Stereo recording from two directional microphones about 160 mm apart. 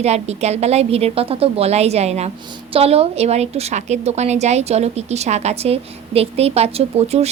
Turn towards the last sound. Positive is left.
turn(degrees=-40)  # may be behind; listen again after turning